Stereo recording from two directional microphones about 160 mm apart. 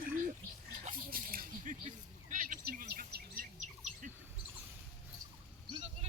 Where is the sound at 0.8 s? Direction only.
60° right (ahead or behind).